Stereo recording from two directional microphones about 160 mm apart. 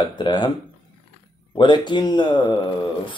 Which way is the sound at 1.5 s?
30° left (ahead or behind).